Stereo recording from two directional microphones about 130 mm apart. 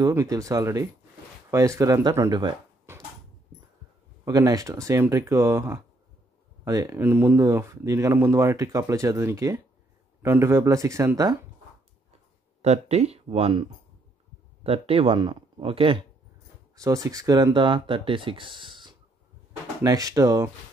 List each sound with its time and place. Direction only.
0.1 s speech: 25° right (ahead or behind)
4.2 s speech: 25° right (ahead or behind)
7.0 s speech: 15° right (ahead or behind)
12.6 s speech: 55° right (ahead or behind)
16.7 s speech: 25° right (ahead or behind)
19.8 s speech: 25° right (ahead or behind)